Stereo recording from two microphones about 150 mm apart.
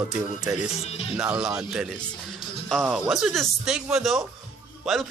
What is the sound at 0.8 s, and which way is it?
Speech, 40° left (ahead or behind).